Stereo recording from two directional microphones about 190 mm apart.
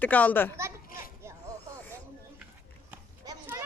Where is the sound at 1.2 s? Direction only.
15° right (ahead or behind).